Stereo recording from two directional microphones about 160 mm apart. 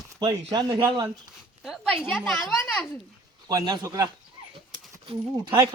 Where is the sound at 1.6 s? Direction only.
Centre (ahead or behind).